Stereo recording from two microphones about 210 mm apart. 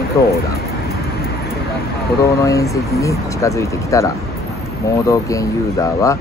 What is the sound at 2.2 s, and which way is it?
Speech, 15° left (ahead or behind).